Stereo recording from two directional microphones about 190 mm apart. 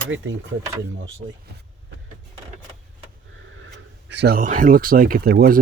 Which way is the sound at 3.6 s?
65° right (ahead or behind).